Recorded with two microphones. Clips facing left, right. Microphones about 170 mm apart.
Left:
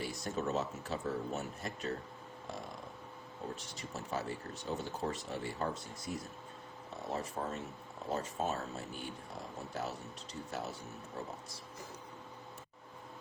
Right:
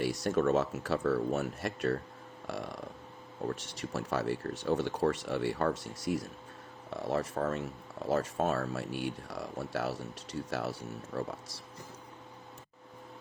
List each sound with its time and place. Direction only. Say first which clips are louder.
0.0 s speech: right 9 dB; 85° right
3.5 s speech: right 7 dB; 85° right